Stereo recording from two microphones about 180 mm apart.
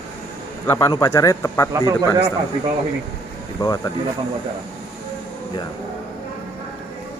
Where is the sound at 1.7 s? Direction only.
20° right (ahead or behind).